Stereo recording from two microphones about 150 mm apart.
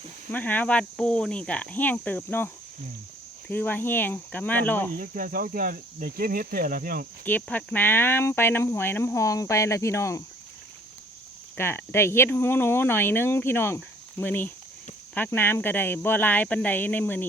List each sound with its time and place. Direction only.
0.3 s speech: 10° left (ahead or behind)
3.5 s speech: 10° left (ahead or behind)
4.9 s speech: 70° right (ahead or behind)
7.3 s speech: 10° left (ahead or behind)
11.5 s speech: 15° left (ahead or behind)